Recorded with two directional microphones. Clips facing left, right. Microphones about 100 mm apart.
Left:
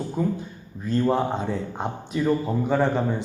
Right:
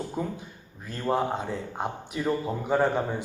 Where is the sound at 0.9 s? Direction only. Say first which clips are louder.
Left 5 dB; 5° right (ahead or behind).